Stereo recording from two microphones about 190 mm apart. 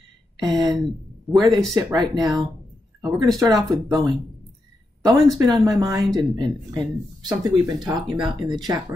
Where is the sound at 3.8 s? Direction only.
20° right (ahead or behind).